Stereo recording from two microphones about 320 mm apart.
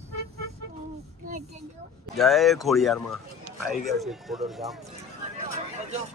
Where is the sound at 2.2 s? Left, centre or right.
Centre.